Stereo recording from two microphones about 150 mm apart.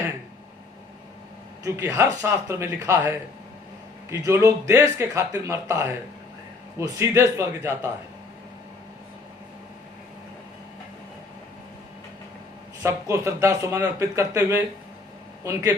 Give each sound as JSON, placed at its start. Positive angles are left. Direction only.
{"t": 1.6, "sound": "a man's voice", "side_deg": -20}
{"t": 12.8, "sound": "speech", "side_deg": -20}